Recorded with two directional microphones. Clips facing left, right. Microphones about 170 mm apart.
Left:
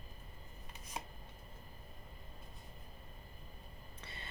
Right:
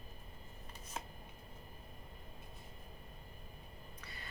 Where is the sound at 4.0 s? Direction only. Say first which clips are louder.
Left 2 dB; 25° left (ahead or behind).